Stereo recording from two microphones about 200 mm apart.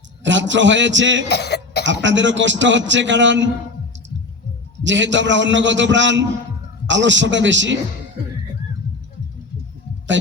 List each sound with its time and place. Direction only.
0.2 s a man's voice: 65° right (ahead or behind)
1.3 s speech: 55° left (ahead or behind)
1.8 s a man's voice: 65° right (ahead or behind)
4.8 s a man's voice: 65° right (ahead or behind)